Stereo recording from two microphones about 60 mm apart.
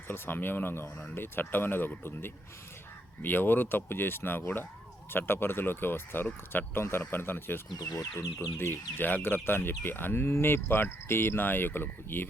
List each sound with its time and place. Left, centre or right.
0.1 s speech: left
7.9 s speech: centre
8.5 s speech: left